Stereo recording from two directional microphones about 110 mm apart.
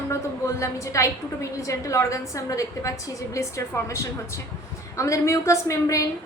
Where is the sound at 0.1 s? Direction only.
25° left (ahead or behind).